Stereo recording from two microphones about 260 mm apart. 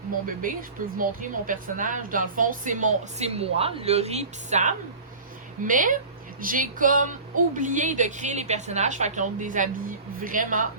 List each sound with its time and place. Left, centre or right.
0.4 s a woman's voice: right